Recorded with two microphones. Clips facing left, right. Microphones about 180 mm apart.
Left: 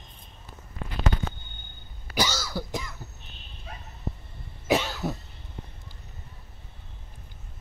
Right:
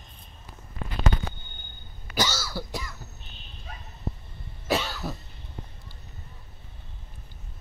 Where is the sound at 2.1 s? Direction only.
15° left (ahead or behind).